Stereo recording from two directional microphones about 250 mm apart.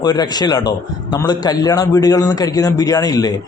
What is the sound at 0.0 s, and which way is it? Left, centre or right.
A man's voice, centre.